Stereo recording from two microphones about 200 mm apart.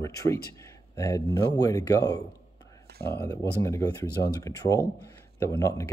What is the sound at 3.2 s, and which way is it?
Speech, 15° left (ahead or behind).